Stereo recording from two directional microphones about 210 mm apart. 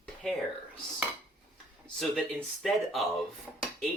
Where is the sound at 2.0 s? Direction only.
Centre (ahead or behind).